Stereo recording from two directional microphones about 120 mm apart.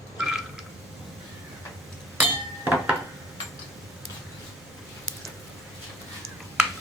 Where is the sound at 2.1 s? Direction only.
15° right (ahead or behind).